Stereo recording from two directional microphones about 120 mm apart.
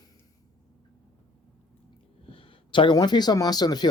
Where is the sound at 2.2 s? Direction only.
45° left (ahead or behind).